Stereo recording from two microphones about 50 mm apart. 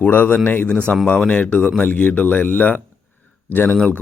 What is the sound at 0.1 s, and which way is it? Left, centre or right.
Speech, left.